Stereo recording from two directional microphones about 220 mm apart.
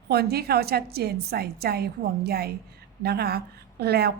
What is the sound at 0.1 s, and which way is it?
A woman's voice, 45° right (ahead or behind).